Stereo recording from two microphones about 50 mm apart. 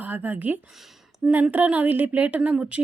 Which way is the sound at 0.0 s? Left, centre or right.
Right.